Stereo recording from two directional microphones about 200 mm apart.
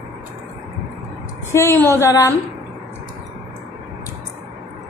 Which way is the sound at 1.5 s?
15° left (ahead or behind).